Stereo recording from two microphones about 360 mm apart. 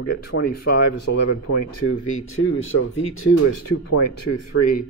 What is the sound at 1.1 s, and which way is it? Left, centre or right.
Speech, left.